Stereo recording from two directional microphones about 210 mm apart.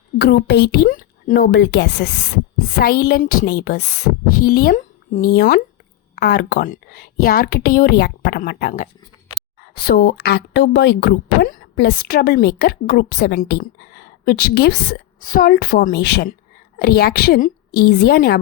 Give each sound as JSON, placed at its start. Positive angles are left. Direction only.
{"t": 0.2, "sound": "a woman's voice", "side_deg": 50}
{"t": 1.5, "sound": "speech", "side_deg": 55}